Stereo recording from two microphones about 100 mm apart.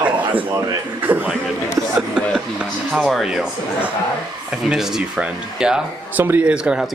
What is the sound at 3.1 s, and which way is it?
Speech, 5° right (ahead or behind).